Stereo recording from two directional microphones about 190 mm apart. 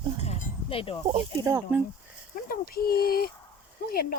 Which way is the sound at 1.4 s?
15° right (ahead or behind).